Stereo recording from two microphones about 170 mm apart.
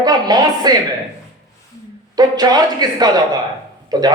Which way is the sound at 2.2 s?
25° right (ahead or behind).